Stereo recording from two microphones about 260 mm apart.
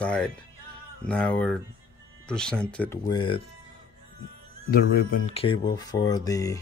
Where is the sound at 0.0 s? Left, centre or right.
Centre.